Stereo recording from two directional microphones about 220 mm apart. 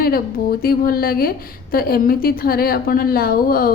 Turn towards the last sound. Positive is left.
turn(degrees=40)  # may be behind; listen again after turning